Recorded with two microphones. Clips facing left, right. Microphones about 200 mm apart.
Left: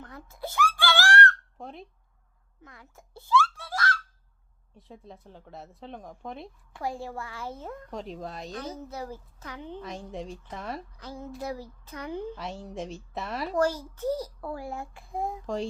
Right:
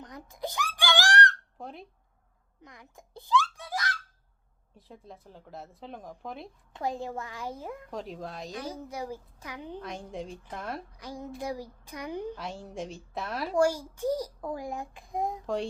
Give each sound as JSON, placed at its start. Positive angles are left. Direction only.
{"t": 0.0, "sound": "a sound", "side_deg": -15}
{"t": 1.5, "sound": "squeak", "side_deg": 0}
{"t": 2.6, "sound": "a sound", "side_deg": -15}
{"t": 4.8, "sound": "speech", "side_deg": 0}
{"t": 6.7, "sound": "a child's voice", "side_deg": -20}
{"t": 7.9, "sound": "speech", "side_deg": 0}
{"t": 8.5, "sound": "a child's voice", "side_deg": -10}
{"t": 9.8, "sound": "speech", "side_deg": 0}
{"t": 10.9, "sound": "a child's voice", "side_deg": -15}
{"t": 12.4, "sound": "speech", "side_deg": 0}
{"t": 13.5, "sound": "a child's voice", "side_deg": -10}
{"t": 15.4, "sound": "speech", "side_deg": 0}